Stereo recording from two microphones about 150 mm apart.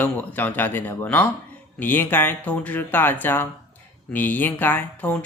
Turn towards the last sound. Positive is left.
turn(degrees=10)  # may be behind; listen again after turning